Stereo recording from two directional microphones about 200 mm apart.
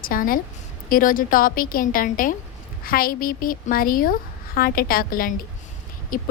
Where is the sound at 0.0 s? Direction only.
45° left (ahead or behind).